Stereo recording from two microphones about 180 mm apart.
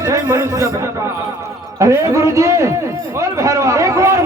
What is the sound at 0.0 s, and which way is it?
A man's voice, 15° right (ahead or behind).